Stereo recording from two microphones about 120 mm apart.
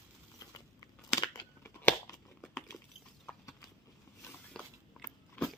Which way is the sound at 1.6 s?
20° left (ahead or behind).